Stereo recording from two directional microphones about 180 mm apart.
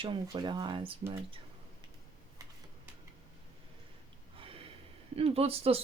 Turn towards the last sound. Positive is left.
turn(degrees=-35)  # may be behind; listen again after turning